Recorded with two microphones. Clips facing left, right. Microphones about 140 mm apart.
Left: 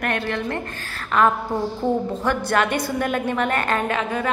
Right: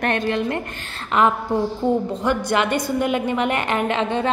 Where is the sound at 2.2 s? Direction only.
15° right (ahead or behind).